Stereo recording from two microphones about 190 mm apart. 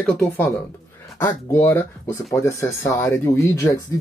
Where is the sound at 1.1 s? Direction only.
15° left (ahead or behind).